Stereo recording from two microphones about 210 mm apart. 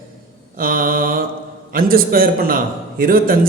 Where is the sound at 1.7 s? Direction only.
45° right (ahead or behind).